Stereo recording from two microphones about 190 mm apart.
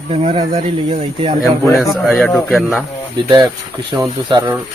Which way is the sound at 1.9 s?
Centre (ahead or behind).